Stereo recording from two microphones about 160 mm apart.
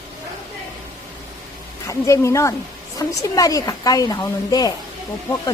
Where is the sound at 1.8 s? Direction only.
20° left (ahead or behind).